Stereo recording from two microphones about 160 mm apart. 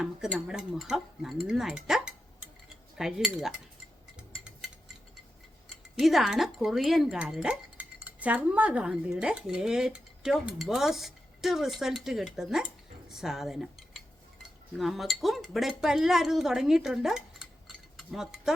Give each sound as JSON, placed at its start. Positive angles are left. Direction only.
{"t": 0.3, "sound": "speech", "side_deg": -5}
{"t": 4.2, "sound": "a sound", "side_deg": -5}
{"t": 6.0, "sound": "speech", "side_deg": 0}